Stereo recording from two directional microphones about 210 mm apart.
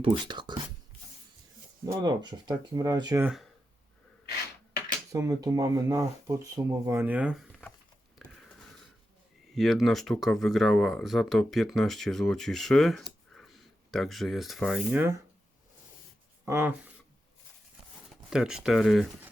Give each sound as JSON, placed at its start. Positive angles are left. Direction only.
{"t": 0.0, "sound": "speech", "side_deg": -20}
{"t": 1.8, "sound": "speech", "side_deg": -15}
{"t": 5.1, "sound": "speech", "side_deg": -15}
{"t": 8.4, "sound": "a sound", "side_deg": 0}
{"t": 9.6, "sound": "speech", "side_deg": 0}
{"t": 16.5, "sound": "speech", "side_deg": -10}
{"t": 18.3, "sound": "speech", "side_deg": -5}